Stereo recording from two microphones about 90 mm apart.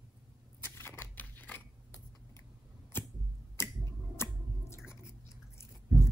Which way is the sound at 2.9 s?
25° left (ahead or behind).